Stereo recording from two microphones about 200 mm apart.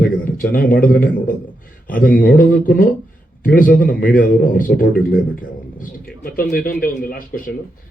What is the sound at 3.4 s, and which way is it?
A man's voice, 45° left (ahead or behind).